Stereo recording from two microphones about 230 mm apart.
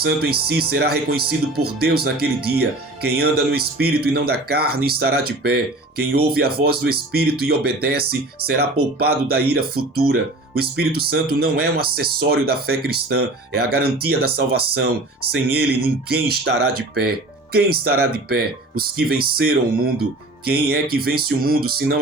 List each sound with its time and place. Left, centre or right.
0.0 s speech: right